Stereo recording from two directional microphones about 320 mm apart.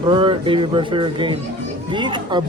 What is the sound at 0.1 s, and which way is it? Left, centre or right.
Speech, centre.